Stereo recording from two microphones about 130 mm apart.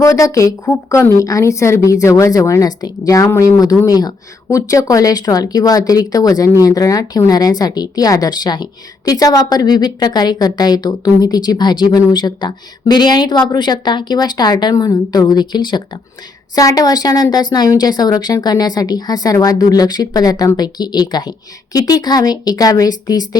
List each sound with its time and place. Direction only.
0.0 s a woman's voice: 25° left (ahead or behind)